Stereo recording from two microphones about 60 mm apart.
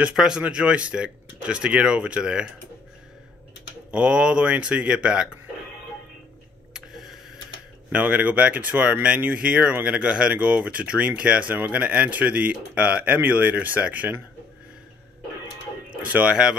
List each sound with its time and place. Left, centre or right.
0.1 s speech: centre
0.4 s speech: centre
3.9 s speech: centre
6.7 s a sound: centre
7.9 s speech: right
11.5 s speech: right
16.0 s speech: right